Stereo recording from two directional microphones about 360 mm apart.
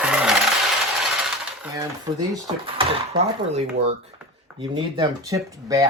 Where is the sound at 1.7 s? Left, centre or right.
Centre.